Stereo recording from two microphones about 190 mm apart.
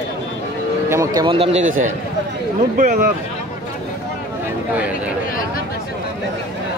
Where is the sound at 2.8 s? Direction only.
45° right (ahead or behind).